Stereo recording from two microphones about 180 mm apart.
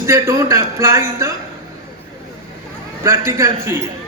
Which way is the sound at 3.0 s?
15° right (ahead or behind).